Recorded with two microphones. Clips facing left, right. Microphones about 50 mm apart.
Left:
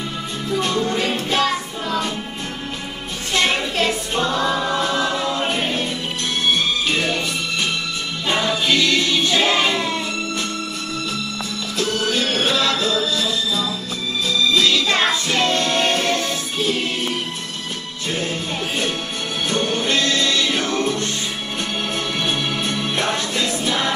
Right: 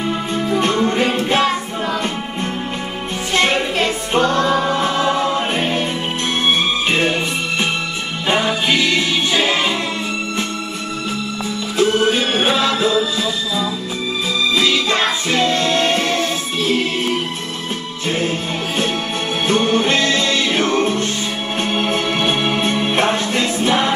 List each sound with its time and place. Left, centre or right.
0.5 s music: right
4.1 s music: right
4.5 s music: right
6.9 s music: right
8.3 s music: right
11.8 s music: right
19.4 s music: right